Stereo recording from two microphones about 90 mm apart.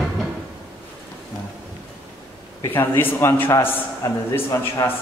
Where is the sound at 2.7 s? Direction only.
25° left (ahead or behind).